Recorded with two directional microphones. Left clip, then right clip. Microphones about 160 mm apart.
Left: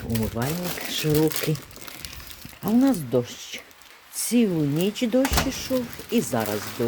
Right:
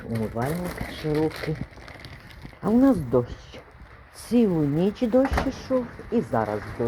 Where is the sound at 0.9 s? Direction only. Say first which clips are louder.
Left 4 dB; 35° left (ahead or behind).